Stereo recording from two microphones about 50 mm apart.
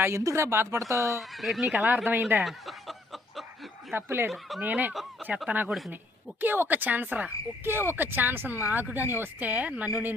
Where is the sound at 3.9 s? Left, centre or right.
Right.